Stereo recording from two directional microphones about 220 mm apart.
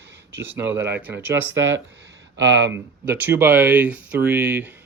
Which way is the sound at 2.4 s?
55° right (ahead or behind).